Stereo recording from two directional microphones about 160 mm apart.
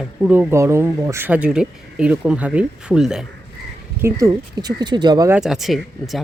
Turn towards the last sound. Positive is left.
turn(degrees=0)  # may be behind; listen again after turning